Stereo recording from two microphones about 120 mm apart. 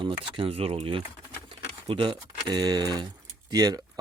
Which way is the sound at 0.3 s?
55° right (ahead or behind).